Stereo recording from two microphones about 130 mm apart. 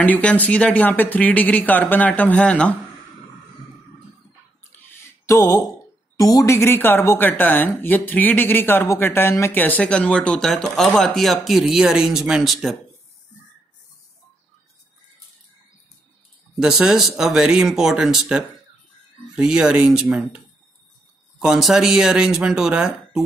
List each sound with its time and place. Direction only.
0.0 s speech: 10° left (ahead or behind)
4.9 s music: 20° left (ahead or behind)
6.1 s speech: 25° left (ahead or behind); by 12.7 s 5° right (ahead or behind)
16.5 s speech: 5° right (ahead or behind)